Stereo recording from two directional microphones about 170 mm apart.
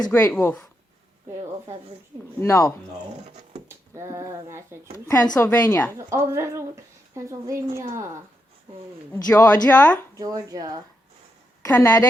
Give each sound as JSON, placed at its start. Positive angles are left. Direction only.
{"t": 0.0, "sound": "a woman's voice", "side_deg": 15}
{"t": 2.4, "sound": "a woman's voice", "side_deg": 15}
{"t": 3.7, "sound": "speech", "side_deg": -15}
{"t": 5.0, "sound": "a woman's voice", "side_deg": 20}
{"t": 6.0, "sound": "a woman's voice", "side_deg": -15}
{"t": 9.1, "sound": "a woman's voice", "side_deg": 15}
{"t": 10.2, "sound": "speech", "side_deg": -20}
{"t": 11.6, "sound": "a woman's voice", "side_deg": 20}